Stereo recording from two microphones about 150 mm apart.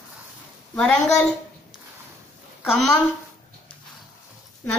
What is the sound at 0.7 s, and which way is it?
Speech, 5° left (ahead or behind).